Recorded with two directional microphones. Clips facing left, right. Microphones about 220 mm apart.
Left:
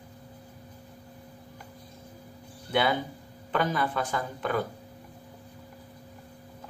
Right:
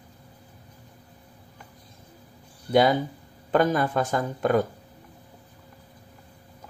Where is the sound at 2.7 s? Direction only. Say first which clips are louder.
Right 6 dB; 40° right (ahead or behind).